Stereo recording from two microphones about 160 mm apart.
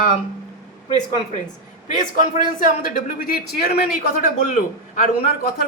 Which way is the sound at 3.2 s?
70° left (ahead or behind).